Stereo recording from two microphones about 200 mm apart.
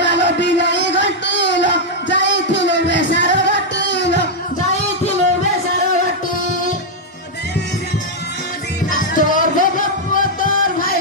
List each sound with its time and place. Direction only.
0.0 s music: 60° left (ahead or behind)
9.1 s music: 40° left (ahead or behind)